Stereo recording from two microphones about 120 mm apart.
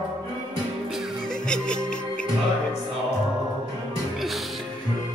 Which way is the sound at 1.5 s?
5° left (ahead or behind).